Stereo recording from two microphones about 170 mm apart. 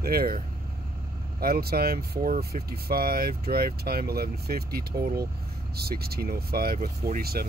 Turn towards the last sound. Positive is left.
turn(degrees=-60)  # may be behind; listen again after turning